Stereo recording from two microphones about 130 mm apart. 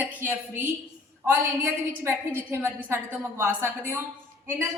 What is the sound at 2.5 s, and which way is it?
A woman's voice, 20° right (ahead or behind).